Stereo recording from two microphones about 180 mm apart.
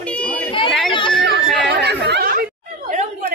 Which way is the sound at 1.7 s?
65° right (ahead or behind).